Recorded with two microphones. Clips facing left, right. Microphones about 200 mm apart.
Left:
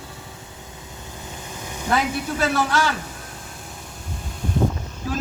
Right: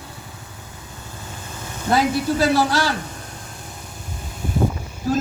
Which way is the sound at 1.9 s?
35° right (ahead or behind).